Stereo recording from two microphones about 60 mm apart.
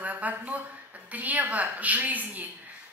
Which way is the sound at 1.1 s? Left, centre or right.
Right.